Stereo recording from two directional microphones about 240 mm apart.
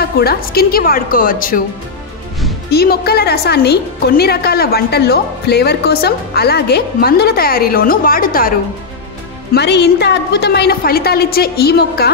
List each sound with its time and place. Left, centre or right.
0.0 s a woman's voice: left
2.7 s a woman's voice: left